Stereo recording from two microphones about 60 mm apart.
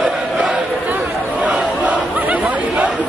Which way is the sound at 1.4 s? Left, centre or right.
Right.